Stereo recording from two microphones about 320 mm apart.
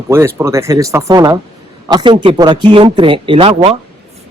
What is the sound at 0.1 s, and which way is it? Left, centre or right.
Speech, centre.